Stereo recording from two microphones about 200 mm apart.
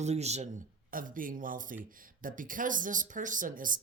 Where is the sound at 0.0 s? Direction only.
35° right (ahead or behind).